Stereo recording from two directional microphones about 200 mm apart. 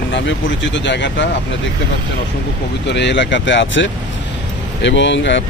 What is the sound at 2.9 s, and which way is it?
Speech, 60° left (ahead or behind).